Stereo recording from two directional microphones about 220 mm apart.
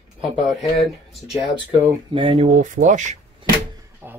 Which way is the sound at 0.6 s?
Centre (ahead or behind).